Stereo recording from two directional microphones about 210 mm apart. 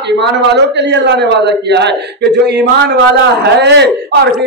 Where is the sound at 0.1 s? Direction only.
55° right (ahead or behind).